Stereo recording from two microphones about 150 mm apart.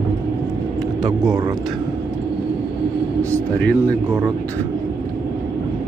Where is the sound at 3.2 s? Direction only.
10° left (ahead or behind).